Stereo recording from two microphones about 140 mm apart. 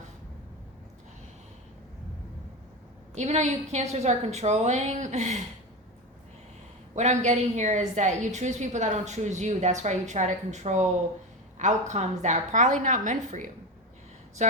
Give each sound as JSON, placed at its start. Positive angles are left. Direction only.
{"t": 3.2, "sound": "a woman's voice", "side_deg": -55}
{"t": 6.9, "sound": "a woman's voice", "side_deg": -55}